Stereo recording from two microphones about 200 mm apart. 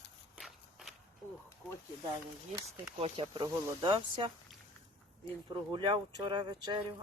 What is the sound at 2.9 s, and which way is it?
Speech, 30° right (ahead or behind).